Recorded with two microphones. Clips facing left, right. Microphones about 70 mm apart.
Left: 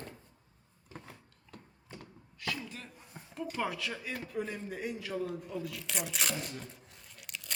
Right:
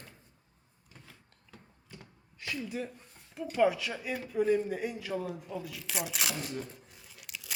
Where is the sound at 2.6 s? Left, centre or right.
Centre.